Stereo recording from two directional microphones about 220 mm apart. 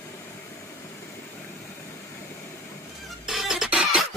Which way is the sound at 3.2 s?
Centre (ahead or behind).